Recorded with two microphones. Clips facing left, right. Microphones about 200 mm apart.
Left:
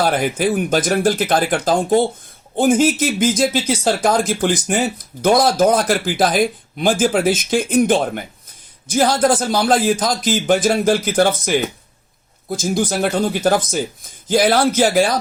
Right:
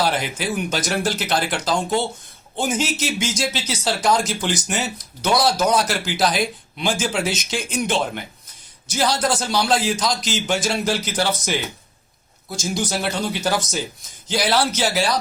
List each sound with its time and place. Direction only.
0.0 s speech: 50° left (ahead or behind)